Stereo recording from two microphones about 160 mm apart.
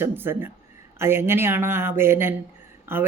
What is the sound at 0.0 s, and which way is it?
Speech, 15° right (ahead or behind).